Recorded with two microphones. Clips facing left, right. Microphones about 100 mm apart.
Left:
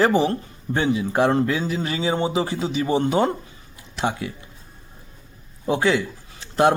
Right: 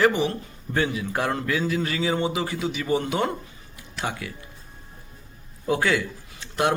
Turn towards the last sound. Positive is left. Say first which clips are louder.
# left 6 dB
turn(degrees=30)  # may be behind; listen again after turning